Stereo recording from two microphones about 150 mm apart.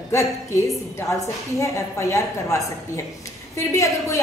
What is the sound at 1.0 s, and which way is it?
A woman's voice, 20° left (ahead or behind).